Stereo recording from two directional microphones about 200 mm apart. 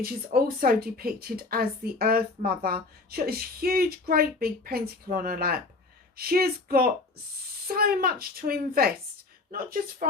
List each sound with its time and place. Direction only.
0.0 s speech: 50° right (ahead or behind)